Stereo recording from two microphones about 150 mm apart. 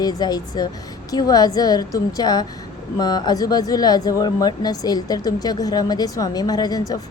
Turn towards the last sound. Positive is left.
turn(degrees=25)  # may be behind; listen again after turning